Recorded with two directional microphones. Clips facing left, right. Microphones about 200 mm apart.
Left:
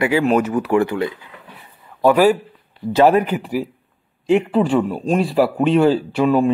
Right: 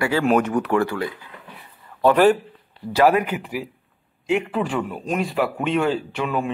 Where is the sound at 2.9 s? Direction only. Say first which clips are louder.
Left 4 dB; 30° left (ahead or behind).